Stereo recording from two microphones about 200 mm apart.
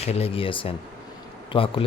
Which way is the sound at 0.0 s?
30° left (ahead or behind).